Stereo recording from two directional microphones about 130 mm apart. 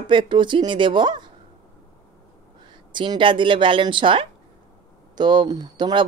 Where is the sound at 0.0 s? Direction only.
40° right (ahead or behind).